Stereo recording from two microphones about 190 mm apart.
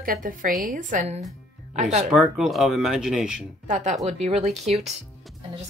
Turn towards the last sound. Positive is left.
turn(degrees=-35)  # may be behind; listen again after turning